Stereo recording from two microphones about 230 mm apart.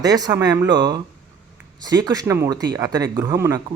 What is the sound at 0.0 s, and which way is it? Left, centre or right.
Speech, centre.